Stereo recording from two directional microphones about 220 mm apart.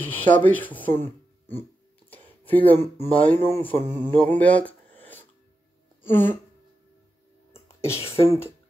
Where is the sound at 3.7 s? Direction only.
35° right (ahead or behind).